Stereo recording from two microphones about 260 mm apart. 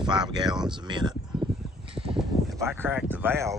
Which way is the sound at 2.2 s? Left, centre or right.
Centre.